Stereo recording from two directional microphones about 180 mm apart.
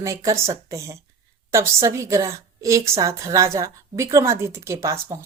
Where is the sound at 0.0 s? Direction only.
15° right (ahead or behind).